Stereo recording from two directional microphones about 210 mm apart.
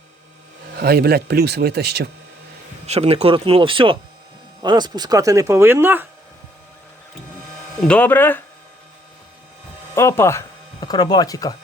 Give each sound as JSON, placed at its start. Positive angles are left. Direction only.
{"t": 0.8, "sound": "speech", "side_deg": -50}
{"t": 2.8, "sound": "speech", "side_deg": -30}
{"t": 7.8, "sound": "speech", "side_deg": 5}
{"t": 9.9, "sound": "speech", "side_deg": 15}